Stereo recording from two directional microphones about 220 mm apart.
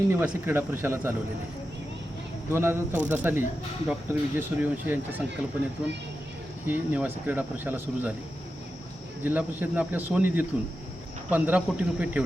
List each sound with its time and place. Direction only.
0.1 s speech: 10° right (ahead or behind)
2.5 s speech: 10° right (ahead or behind)
9.2 s speech: 5° right (ahead or behind)